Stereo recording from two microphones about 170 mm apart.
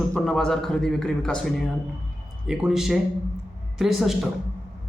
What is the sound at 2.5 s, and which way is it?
A woman's voice, 5° right (ahead or behind).